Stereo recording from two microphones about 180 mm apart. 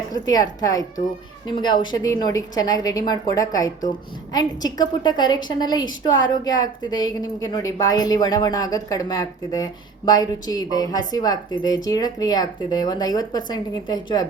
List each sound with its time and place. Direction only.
0.1 s a woman's voice: 20° left (ahead or behind)